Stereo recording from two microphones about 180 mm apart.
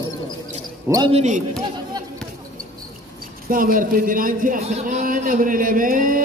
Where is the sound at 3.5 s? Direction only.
50° right (ahead or behind).